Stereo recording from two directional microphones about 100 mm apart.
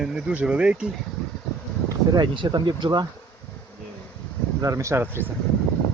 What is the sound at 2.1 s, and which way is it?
Speech, 50° right (ahead or behind).